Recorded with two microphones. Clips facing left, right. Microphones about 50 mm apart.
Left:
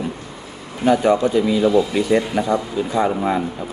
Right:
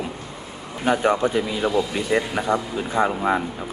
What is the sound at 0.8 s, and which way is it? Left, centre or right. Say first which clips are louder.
Speech: left 4 dB; right.